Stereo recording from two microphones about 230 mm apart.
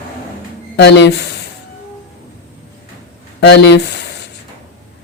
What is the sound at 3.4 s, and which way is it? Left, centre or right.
Speech, left.